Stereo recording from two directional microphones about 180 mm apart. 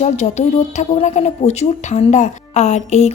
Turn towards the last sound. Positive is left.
turn(degrees=40)  # may be behind; listen again after turning